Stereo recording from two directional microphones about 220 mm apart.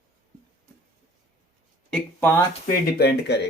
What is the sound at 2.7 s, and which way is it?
Speech, 45° left (ahead or behind).